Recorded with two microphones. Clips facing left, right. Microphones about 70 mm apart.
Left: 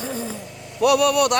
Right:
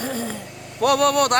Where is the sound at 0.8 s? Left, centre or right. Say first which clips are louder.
Left 1 dB; right.